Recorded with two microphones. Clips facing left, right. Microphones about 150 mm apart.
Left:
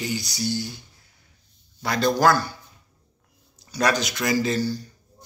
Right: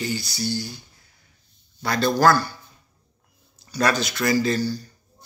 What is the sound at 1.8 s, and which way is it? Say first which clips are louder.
Speech: right 1 dB; 20° left (ahead or behind).